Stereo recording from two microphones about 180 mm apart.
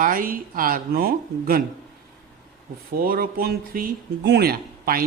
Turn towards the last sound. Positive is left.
turn(degrees=-55)  # may be behind; listen again after turning